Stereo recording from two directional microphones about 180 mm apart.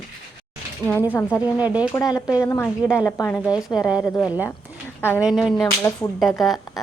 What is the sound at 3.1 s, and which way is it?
Speech, 10° left (ahead or behind).